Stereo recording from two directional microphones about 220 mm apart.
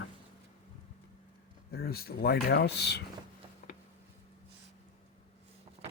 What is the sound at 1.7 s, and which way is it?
Speech, 45° left (ahead or behind).